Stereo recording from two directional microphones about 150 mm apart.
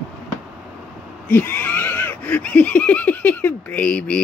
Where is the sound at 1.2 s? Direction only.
10° left (ahead or behind).